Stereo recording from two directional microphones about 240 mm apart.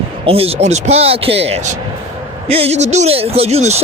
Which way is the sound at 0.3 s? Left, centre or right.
Right.